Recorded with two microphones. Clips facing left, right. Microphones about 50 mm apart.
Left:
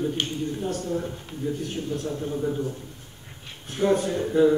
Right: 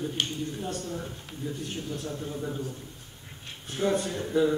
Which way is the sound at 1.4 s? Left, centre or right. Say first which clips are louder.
Left 6 dB; centre.